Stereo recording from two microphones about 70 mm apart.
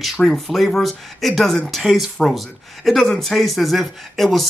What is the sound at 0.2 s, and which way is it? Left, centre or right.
Speech, centre.